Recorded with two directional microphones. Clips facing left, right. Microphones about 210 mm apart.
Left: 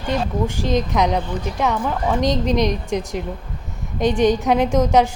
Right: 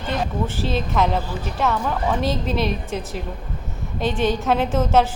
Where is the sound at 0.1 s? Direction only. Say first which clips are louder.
Left 3 dB; 15° left (ahead or behind).